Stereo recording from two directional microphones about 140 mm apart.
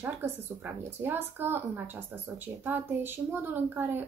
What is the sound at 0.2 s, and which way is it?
A woman's voice, 15° right (ahead or behind).